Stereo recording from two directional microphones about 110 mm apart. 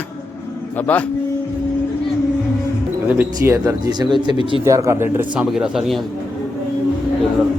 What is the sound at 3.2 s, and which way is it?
Speech, 25° right (ahead or behind).